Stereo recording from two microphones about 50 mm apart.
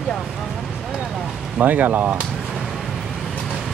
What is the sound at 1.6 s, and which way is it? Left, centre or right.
Speech, right.